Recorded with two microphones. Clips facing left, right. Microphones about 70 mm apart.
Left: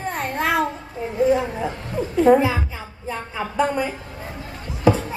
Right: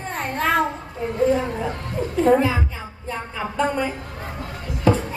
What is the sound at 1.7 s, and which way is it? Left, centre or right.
Speech, right.